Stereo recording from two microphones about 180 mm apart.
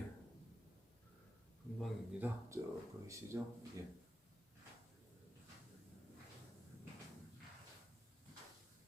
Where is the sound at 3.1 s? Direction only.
15° right (ahead or behind).